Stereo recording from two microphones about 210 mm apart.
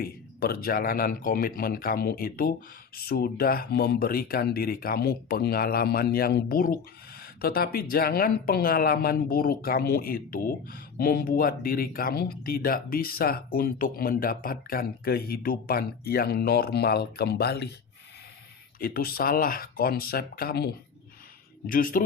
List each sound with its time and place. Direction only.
0.0 s speech: 50° left (ahead or behind)
18.8 s speech: 45° left (ahead or behind)
21.7 s speech: 40° left (ahead or behind)